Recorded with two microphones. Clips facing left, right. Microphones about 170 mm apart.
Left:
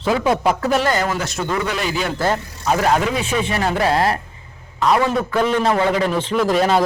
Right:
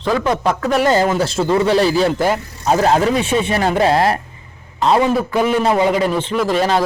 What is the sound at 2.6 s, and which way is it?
A man's voice, 30° right (ahead or behind).